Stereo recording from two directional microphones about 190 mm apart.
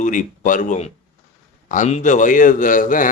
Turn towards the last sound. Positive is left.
turn(degrees=45)  # may be behind; listen again after turning